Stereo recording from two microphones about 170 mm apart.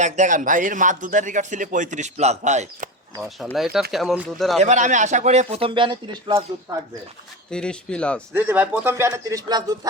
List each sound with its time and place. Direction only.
0.0 s speech: 45° right (ahead or behind)
3.2 s a man's voice: centre (ahead or behind)
4.6 s speech: 45° right (ahead or behind); by 6.4 s 30° right (ahead or behind)
7.5 s a man's voice: 5° left (ahead or behind)
8.3 s speech: 10° right (ahead or behind)